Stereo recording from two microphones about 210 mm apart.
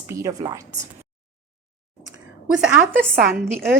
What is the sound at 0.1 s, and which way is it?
Speech, 15° right (ahead or behind).